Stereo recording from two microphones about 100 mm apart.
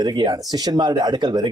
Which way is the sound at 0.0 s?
40° right (ahead or behind).